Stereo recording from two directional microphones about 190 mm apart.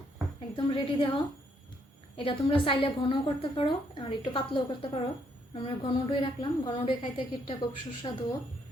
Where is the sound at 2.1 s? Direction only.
25° left (ahead or behind).